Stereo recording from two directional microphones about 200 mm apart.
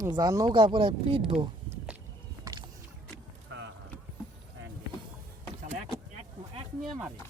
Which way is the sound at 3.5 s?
65° right (ahead or behind).